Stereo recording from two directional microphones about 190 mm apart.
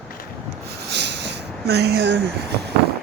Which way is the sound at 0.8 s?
65° right (ahead or behind).